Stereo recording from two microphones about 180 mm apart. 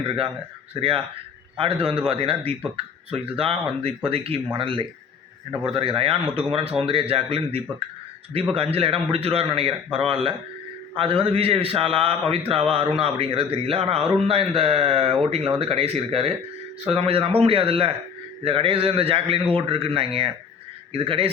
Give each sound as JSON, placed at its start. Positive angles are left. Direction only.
{"t": 0.8, "sound": "speech", "side_deg": -30}